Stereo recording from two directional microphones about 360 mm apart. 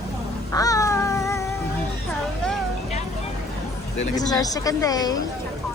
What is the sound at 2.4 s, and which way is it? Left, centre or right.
Music, centre.